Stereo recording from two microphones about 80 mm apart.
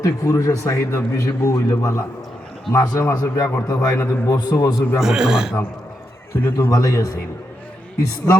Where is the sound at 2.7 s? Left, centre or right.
Left.